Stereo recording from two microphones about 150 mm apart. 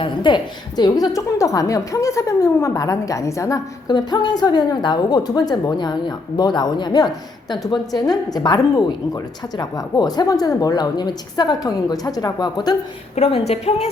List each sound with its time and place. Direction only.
0.0 s a woman's voice: 30° left (ahead or behind)
13.1 s a woman's voice: 40° left (ahead or behind)